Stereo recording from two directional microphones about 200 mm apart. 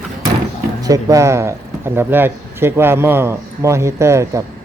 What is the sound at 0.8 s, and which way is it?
Speech, 15° right (ahead or behind).